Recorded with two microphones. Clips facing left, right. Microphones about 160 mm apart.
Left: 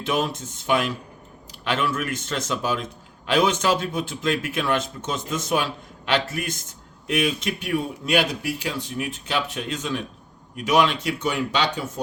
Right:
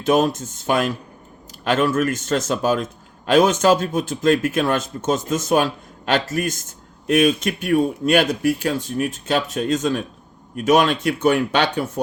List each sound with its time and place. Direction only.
0.0 s speech: 45° right (ahead or behind); by 12.0 s 60° right (ahead or behind)